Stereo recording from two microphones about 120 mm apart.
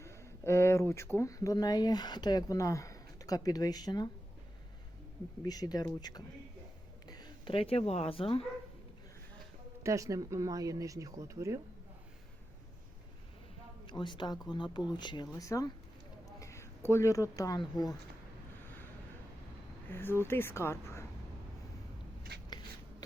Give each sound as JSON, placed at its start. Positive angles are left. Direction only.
{"t": 0.0, "sound": "speech", "side_deg": 20}
{"t": 5.4, "sound": "speech", "side_deg": 30}
{"t": 7.1, "sound": "a sound", "side_deg": 35}
{"t": 7.5, "sound": "speech", "side_deg": 55}
{"t": 9.8, "sound": "speech", "side_deg": -25}
{"t": 13.8, "sound": "speech", "side_deg": 40}
{"t": 19.9, "sound": "a woman's voice", "side_deg": 20}
{"t": 22.4, "sound": "a sound", "side_deg": 35}